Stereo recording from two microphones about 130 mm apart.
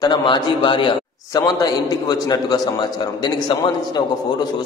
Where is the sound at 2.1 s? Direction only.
30° left (ahead or behind).